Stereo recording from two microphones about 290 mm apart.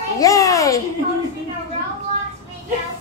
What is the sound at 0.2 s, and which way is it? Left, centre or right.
Babbling, centre.